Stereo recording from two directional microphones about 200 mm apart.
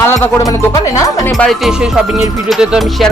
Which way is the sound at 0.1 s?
15° left (ahead or behind).